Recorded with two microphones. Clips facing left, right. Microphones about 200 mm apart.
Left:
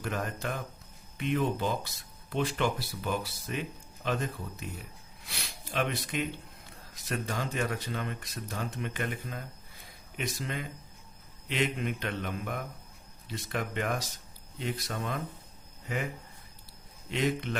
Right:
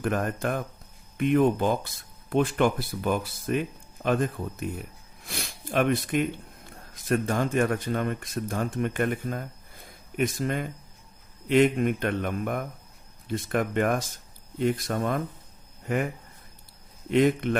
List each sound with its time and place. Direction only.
0.0 s speech: 50° right (ahead or behind)
17.1 s speech: 55° right (ahead or behind)